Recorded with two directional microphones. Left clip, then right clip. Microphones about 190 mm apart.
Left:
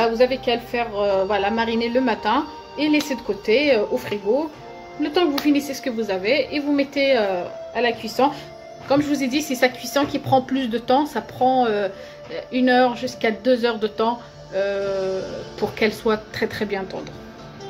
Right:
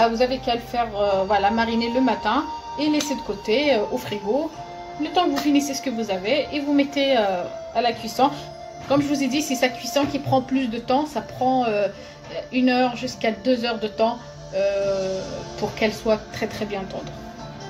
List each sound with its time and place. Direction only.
0.0 s a woman's voice: 25° left (ahead or behind)
15.8 s a woman's voice: 30° left (ahead or behind)